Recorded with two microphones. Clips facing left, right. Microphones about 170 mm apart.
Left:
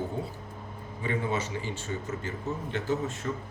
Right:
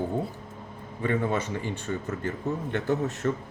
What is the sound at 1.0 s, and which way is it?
A man's voice, 55° right (ahead or behind).